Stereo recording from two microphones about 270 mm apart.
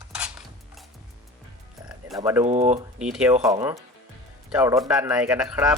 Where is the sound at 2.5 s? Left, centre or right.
Right.